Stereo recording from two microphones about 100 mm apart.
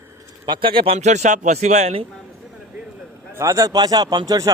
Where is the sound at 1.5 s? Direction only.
80° right.